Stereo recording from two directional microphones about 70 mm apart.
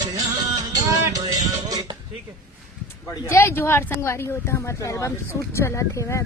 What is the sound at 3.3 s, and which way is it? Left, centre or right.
Speech, left.